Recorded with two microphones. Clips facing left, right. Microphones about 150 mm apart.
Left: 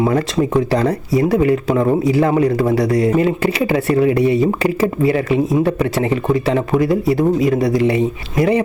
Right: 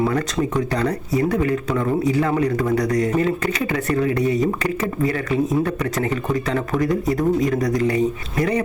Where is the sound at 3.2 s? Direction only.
30° left (ahead or behind).